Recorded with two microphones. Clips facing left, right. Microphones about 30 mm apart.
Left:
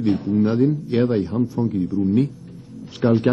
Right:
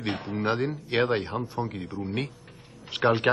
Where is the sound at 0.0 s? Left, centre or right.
Right.